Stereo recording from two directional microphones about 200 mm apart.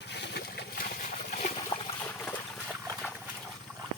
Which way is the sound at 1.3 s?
40° left (ahead or behind).